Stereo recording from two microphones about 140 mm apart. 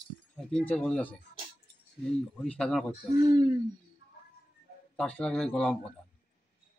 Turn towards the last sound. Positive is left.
turn(degrees=5)  # may be behind; listen again after turning